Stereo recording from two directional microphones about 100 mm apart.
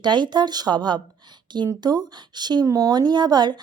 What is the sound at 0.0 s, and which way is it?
Speech, 50° right (ahead or behind).